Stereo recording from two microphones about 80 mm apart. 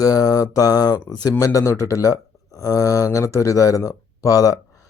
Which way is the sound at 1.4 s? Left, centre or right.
Left.